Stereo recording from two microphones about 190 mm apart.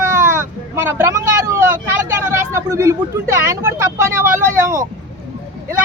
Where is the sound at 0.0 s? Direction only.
15° right (ahead or behind).